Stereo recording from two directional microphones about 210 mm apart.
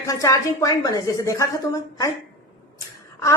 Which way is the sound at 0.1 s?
15° left (ahead or behind).